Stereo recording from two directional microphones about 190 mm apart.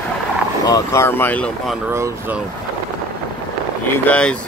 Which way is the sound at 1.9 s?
15° right (ahead or behind).